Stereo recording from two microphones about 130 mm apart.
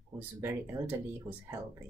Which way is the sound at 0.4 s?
15° right (ahead or behind).